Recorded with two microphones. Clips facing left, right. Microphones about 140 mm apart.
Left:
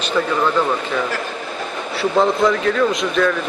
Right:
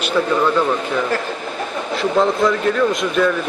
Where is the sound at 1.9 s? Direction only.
Centre (ahead or behind).